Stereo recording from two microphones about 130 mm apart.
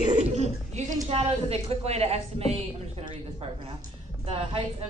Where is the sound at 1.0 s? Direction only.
50° right (ahead or behind).